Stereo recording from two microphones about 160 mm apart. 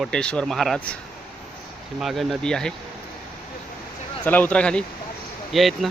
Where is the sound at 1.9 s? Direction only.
Centre (ahead or behind).